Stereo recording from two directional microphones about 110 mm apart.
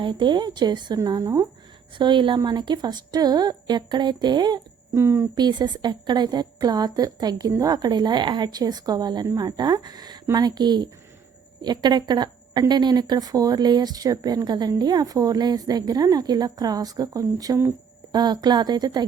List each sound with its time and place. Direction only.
0.0 s a woman's voice: 45° right (ahead or behind)
2.0 s a woman's voice: 45° right (ahead or behind)
4.9 s speech: 25° right (ahead or behind)
5.3 s a woman's voice: 40° right (ahead or behind)